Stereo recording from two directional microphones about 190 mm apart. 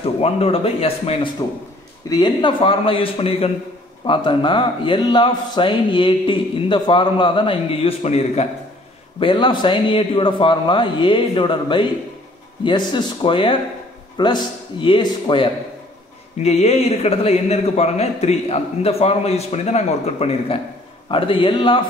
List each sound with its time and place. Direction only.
0.0 s a man's voice: 30° left (ahead or behind)